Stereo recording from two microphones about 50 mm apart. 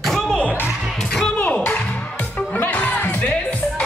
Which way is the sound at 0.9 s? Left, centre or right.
Centre.